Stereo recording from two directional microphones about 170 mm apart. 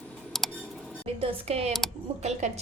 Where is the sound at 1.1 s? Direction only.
35° right (ahead or behind).